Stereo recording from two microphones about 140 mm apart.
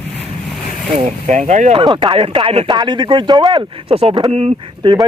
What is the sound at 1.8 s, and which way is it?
Speech, 35° right (ahead or behind).